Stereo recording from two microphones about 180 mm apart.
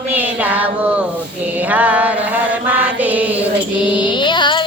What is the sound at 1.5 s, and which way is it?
Mantra, 10° right (ahead or behind).